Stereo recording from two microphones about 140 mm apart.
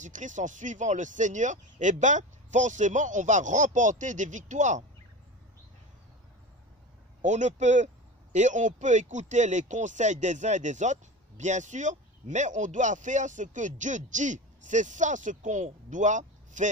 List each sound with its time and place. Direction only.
0.0 s speech: 60° right (ahead or behind)
7.2 s speech: 60° right (ahead or behind)